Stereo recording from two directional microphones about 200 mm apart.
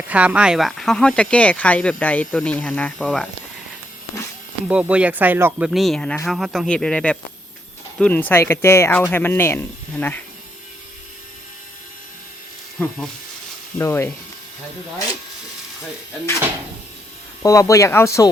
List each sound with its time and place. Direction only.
0.1 s speech: 5° right (ahead or behind)
4.7 s speech: 5° right (ahead or behind)
12.8 s speech: 10° left (ahead or behind)
17.4 s speech: 15° left (ahead or behind)